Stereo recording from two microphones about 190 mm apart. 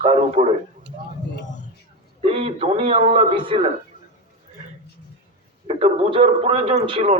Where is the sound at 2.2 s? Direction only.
30° right (ahead or behind).